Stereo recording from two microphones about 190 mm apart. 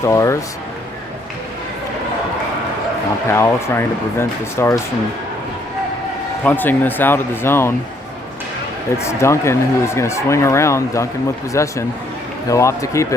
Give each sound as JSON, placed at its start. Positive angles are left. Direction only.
{"t": 0.0, "sound": "speech", "side_deg": 15}
{"t": 3.2, "sound": "speech", "side_deg": 15}
{"t": 6.4, "sound": "speech", "side_deg": 10}
{"t": 9.0, "sound": "speech", "side_deg": 15}